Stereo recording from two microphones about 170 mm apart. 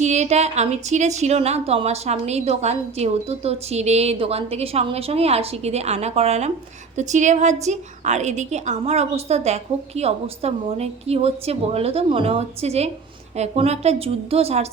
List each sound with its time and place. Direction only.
0.0 s a woman's voice: 40° right (ahead or behind)